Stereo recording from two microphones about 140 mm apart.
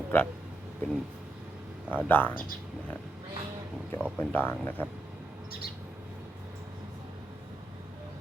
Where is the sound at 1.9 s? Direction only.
10° left (ahead or behind).